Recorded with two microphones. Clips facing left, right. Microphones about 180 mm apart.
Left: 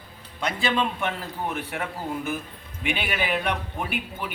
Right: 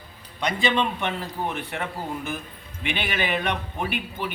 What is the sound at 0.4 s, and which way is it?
Speech, 5° left (ahead or behind).